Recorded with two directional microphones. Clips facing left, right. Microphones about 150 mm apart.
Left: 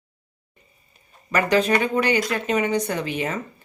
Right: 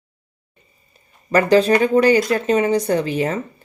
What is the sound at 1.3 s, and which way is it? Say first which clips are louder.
Speech: right 6 dB; 35° right (ahead or behind).